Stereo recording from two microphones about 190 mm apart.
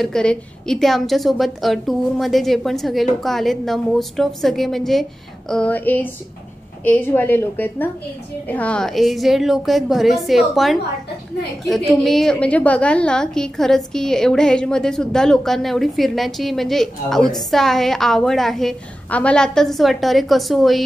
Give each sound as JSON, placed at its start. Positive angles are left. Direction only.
{"t": 0.0, "sound": "a woman's voice", "side_deg": 5}